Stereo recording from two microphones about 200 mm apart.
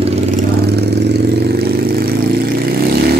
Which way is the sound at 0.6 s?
55° right (ahead or behind).